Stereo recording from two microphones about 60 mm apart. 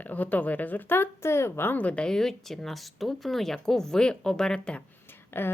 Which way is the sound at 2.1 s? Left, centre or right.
Centre.